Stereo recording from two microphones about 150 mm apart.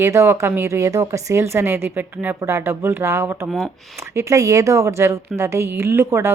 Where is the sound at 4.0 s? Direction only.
20° right (ahead or behind).